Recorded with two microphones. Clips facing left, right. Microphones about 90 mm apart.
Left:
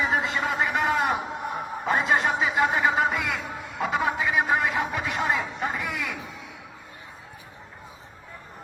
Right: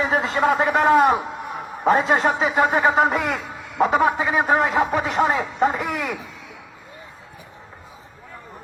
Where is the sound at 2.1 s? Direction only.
60° right (ahead or behind).